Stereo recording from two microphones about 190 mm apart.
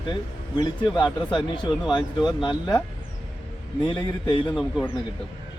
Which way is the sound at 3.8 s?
25° left (ahead or behind).